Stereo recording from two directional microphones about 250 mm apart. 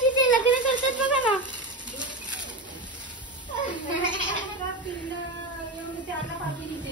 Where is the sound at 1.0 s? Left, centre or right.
Centre.